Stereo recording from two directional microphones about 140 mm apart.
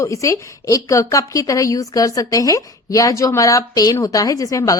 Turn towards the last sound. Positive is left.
turn(degrees=25)  # may be behind; listen again after turning